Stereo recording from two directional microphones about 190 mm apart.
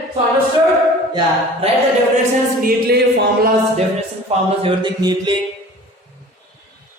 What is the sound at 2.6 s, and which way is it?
Music, 50° right (ahead or behind).